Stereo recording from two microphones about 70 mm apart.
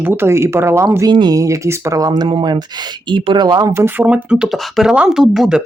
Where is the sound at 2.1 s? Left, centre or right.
Right.